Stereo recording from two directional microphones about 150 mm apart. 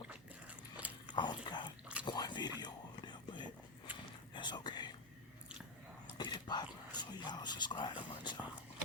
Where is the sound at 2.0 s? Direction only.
30° left (ahead or behind).